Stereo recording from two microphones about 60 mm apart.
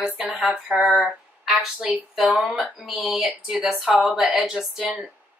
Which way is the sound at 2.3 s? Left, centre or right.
Right.